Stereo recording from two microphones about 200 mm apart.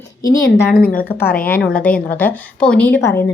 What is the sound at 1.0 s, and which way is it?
A woman's voice, 10° left (ahead or behind).